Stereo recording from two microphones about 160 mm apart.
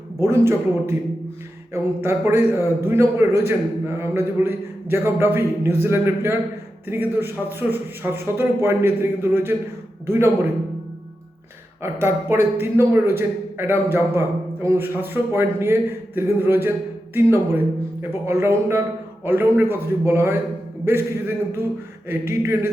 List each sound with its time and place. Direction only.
0.2 s a man's voice: 15° right (ahead or behind)
11.8 s a man's voice: 15° right (ahead or behind)